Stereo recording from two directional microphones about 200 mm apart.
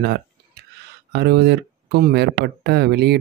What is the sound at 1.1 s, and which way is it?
Speech, 55° right (ahead or behind).